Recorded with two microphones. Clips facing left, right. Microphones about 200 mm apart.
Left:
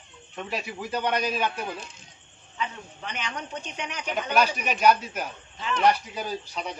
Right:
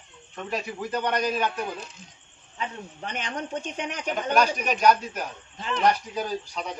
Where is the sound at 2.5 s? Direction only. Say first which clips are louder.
Even; 45° right (ahead or behind).